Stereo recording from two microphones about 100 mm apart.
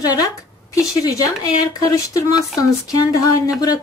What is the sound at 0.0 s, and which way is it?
Speech, 40° left (ahead or behind).